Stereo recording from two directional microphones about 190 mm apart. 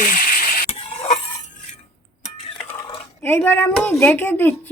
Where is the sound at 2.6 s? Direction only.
15° left (ahead or behind).